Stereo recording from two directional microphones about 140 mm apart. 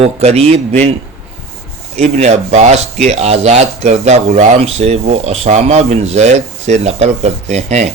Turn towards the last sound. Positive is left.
turn(degrees=-55)  # may be behind; listen again after turning